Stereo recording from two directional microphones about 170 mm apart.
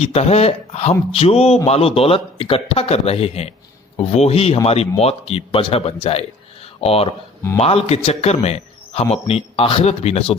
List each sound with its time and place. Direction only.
0.0 s a man's voice: 40° left (ahead or behind)